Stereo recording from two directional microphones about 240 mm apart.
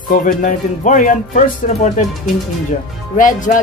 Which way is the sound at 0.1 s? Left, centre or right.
Left.